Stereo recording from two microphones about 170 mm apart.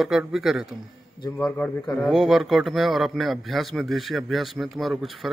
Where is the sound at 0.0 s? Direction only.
Centre (ahead or behind).